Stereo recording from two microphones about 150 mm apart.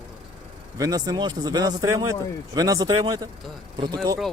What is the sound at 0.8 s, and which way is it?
Speech, 25° right (ahead or behind).